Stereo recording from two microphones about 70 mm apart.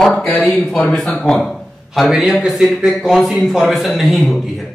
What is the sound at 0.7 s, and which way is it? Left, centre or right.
Speech, centre.